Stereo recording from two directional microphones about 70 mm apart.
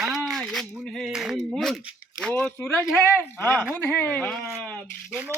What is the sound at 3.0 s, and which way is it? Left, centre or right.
Speech, left.